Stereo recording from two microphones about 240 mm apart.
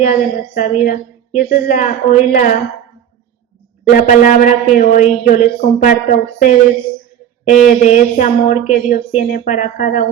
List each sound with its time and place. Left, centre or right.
0.0 s a woman's voice: left
4.0 s a woman's voice: left